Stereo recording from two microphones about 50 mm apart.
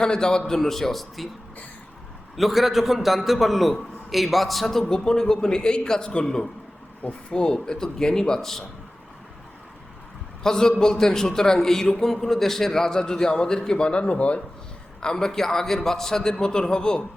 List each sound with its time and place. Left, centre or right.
0.0 s a man's voice: centre
2.3 s a man's voice: centre
7.0 s speech: left
7.3 s a man's voice: centre
10.4 s a man's voice: centre
15.0 s a man's voice: centre